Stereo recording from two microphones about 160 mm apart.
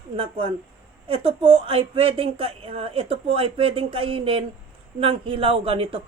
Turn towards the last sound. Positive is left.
turn(degrees=-35)  # may be behind; listen again after turning